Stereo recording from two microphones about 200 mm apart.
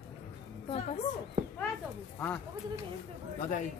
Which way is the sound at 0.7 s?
30° left (ahead or behind).